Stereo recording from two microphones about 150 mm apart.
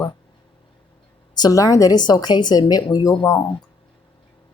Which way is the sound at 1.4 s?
25° left (ahead or behind).